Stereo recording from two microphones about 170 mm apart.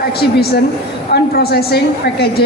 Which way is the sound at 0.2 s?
70° left (ahead or behind).